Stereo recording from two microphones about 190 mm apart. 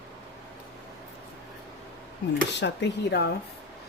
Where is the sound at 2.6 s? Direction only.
60° left (ahead or behind).